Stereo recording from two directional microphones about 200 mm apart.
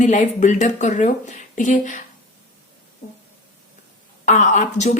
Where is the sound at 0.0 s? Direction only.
35° left (ahead or behind).